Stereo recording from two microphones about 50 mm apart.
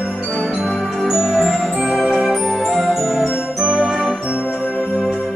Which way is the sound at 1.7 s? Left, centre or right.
Centre.